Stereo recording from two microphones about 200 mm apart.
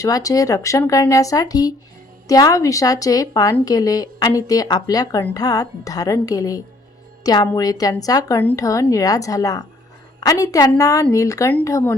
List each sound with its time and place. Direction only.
0.0 s a woman's voice: 15° left (ahead or behind)